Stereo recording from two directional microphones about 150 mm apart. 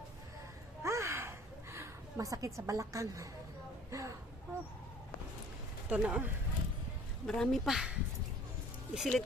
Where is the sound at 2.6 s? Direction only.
20° right (ahead or behind).